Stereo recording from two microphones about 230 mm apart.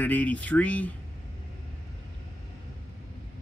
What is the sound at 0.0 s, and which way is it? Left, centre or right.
Speech, centre.